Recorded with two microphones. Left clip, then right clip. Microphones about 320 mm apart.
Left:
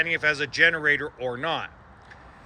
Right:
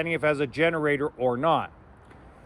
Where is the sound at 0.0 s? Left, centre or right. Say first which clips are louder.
Left 1 dB; centre.